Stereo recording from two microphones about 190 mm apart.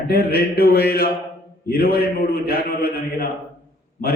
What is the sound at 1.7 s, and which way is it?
A man's voice, 55° left (ahead or behind).